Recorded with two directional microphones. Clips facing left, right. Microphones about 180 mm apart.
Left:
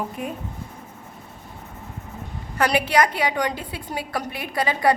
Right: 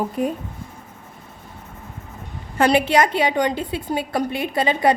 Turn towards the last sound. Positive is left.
turn(degrees=-25)  # may be behind; listen again after turning